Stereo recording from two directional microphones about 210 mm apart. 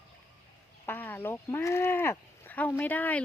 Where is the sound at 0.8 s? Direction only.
10° left (ahead or behind).